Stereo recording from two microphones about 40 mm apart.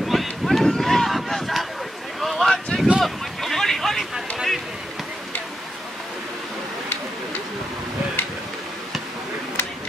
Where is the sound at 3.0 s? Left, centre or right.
Centre.